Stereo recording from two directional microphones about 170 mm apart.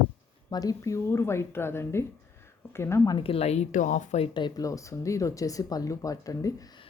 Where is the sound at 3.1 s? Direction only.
35° left (ahead or behind).